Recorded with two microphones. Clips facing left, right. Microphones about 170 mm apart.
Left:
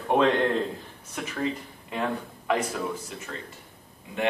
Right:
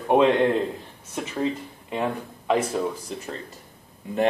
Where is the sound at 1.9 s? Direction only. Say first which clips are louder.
Right 2 dB; 20° right (ahead or behind).